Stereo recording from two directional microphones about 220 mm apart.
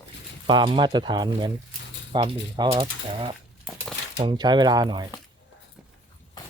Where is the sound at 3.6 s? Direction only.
Centre (ahead or behind).